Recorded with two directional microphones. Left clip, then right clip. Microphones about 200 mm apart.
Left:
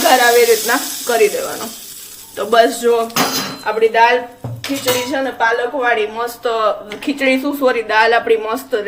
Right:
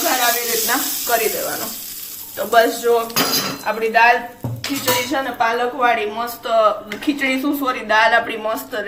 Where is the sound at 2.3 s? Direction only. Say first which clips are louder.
Left 3 dB; 55° left (ahead or behind).